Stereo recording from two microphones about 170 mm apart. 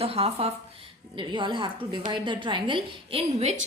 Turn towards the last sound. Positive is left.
turn(degrees=-35)  # may be behind; listen again after turning